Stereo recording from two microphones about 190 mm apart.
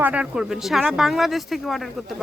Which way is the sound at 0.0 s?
5° right (ahead or behind).